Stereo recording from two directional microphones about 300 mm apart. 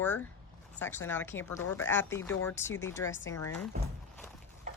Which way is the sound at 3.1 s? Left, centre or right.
Left.